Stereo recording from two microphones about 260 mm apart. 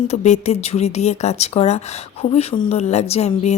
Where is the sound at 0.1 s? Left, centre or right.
Left.